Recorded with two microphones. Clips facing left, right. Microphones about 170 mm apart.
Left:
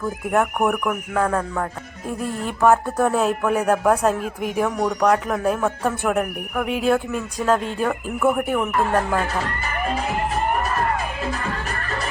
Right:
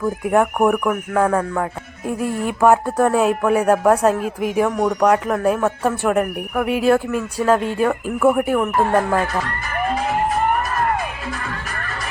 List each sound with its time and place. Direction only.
0.3 s speech: centre (ahead or behind)